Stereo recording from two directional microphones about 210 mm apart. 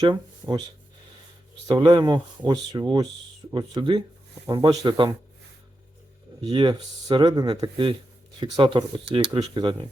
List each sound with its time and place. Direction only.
0.0 s speech: 20° right (ahead or behind)
1.6 s speech: 20° right (ahead or behind)
6.4 s speech: 20° right (ahead or behind)